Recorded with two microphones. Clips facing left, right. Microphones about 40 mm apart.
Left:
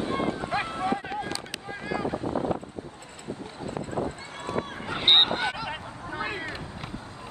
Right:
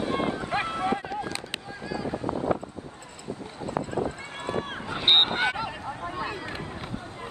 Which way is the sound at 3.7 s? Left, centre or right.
Right.